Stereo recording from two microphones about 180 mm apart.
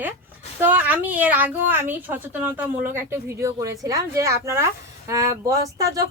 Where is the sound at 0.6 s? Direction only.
10° right (ahead or behind).